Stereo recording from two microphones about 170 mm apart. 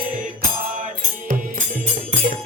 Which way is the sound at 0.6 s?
55° right (ahead or behind).